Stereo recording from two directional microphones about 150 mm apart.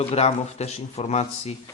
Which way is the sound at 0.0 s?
40° left (ahead or behind).